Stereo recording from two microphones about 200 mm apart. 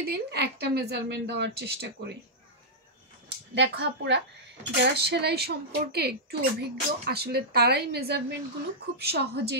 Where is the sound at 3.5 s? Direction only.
60° right (ahead or behind).